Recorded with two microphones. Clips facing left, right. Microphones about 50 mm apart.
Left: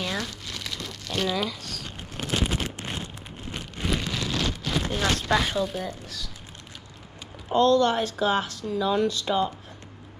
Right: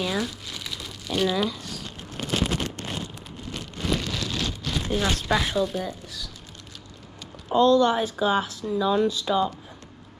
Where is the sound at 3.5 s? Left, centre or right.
Centre.